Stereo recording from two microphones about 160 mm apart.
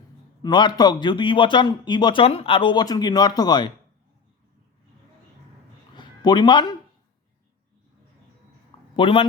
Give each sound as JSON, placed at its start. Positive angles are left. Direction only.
{"t": 0.4, "sound": "speech", "side_deg": 25}
{"t": 6.0, "sound": "speech", "side_deg": 30}
{"t": 9.0, "sound": "a man's voice", "side_deg": 35}